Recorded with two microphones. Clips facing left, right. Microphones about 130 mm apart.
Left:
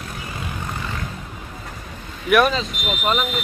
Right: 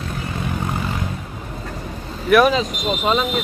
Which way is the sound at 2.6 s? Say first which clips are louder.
Right 5 dB; 40° right (ahead or behind).